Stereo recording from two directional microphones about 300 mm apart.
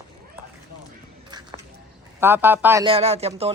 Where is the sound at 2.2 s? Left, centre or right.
Centre.